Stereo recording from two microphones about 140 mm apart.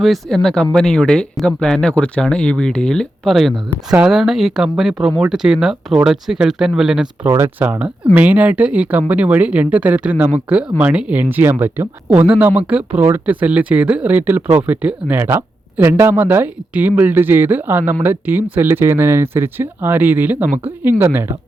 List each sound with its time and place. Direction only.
0.0 s speech: centre (ahead or behind)
7.3 s speech: 20° right (ahead or behind)